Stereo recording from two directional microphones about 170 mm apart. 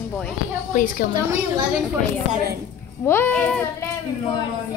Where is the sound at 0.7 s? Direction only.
55° left (ahead or behind).